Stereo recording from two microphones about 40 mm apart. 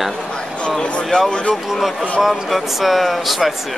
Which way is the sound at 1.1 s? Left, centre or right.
Left.